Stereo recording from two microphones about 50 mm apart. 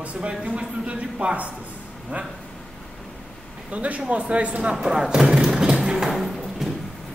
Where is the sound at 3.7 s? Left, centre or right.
Right.